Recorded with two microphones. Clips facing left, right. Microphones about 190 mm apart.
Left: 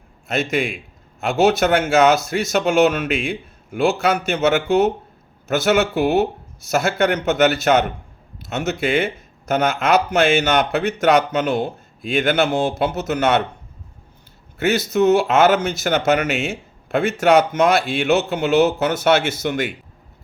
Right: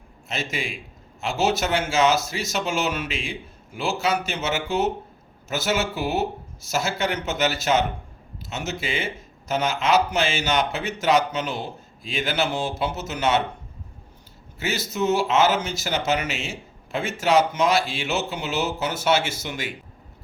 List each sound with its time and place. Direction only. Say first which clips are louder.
0.3 s a man's voice: left 9 dB; 60° left (ahead or behind)
14.6 s speech: left 9 dB; 60° left (ahead or behind)